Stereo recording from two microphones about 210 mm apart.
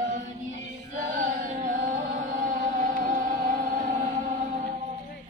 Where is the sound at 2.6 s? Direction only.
40° right (ahead or behind).